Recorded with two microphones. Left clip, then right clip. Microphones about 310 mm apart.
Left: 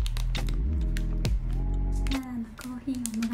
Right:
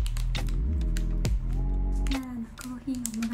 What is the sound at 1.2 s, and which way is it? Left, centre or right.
Music, centre.